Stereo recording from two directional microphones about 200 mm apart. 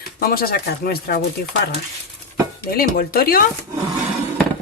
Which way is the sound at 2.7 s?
50° left (ahead or behind).